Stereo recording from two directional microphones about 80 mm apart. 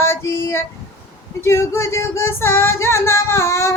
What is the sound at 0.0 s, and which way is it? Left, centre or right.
Female singing, left.